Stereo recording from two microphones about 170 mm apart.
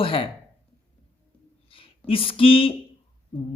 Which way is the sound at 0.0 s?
30° left (ahead or behind).